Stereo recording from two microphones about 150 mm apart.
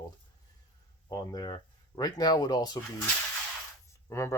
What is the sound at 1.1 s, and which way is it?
Speech, 25° left (ahead or behind).